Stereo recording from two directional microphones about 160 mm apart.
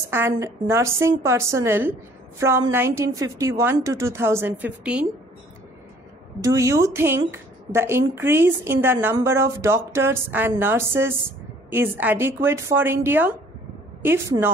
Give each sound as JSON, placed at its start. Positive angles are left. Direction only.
{"t": 0.1, "sound": "speech", "side_deg": -15}
{"t": 6.4, "sound": "speech", "side_deg": -20}